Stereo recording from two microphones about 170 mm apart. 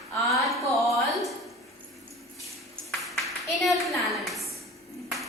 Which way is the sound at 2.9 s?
Centre (ahead or behind).